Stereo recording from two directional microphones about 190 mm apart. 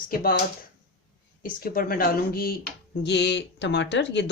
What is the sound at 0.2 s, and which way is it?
Speech, 50° left (ahead or behind).